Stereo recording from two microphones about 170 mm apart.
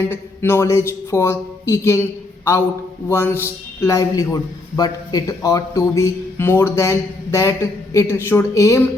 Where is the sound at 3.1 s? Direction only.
15° left (ahead or behind).